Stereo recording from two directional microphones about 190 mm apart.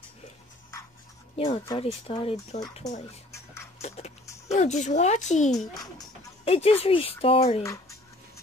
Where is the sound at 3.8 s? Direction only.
35° left (ahead or behind).